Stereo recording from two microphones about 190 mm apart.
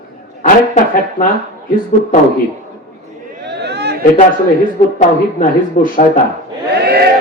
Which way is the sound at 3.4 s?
60° right (ahead or behind).